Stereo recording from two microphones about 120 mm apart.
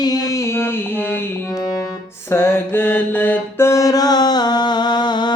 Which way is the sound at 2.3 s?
20° left (ahead or behind).